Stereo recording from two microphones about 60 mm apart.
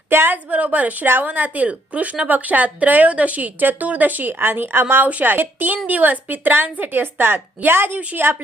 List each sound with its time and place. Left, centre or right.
0.1 s a woman's voice: right
0.5 s a woman's voice: right